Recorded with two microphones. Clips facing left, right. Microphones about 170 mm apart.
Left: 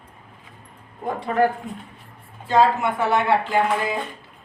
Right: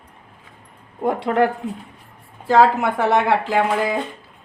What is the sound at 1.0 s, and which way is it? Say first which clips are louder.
Speech: right 3 dB; 75° right (ahead or behind).